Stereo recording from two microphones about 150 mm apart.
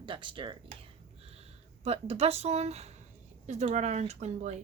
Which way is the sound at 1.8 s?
45° right (ahead or behind).